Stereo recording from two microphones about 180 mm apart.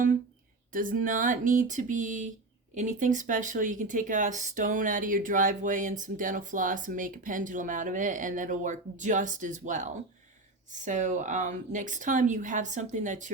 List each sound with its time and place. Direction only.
0.7 s speech: 50° right (ahead or behind)